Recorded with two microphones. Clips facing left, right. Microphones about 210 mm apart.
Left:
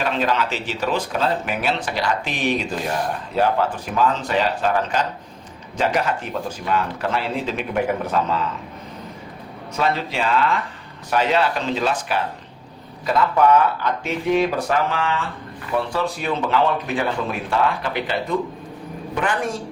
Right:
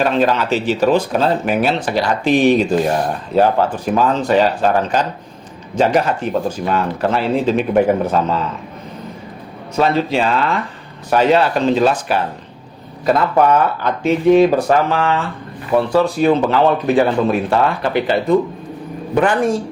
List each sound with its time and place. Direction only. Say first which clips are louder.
0.0 s speech: right 6 dB; 40° right (ahead or behind)
9.7 s speech: right 7 dB; 30° right (ahead or behind); by 13.9 s 45° right (ahead or behind)
14.0 s speech: right 10 dB; 30° right (ahead or behind)